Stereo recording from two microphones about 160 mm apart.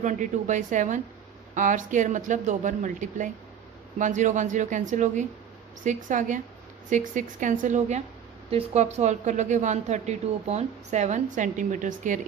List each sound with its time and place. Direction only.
0.0 s a woman's voice: 50° right (ahead or behind)